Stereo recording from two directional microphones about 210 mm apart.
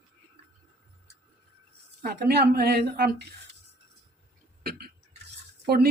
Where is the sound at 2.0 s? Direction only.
50° right (ahead or behind).